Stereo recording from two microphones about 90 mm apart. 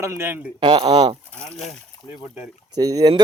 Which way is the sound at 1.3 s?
15° left (ahead or behind).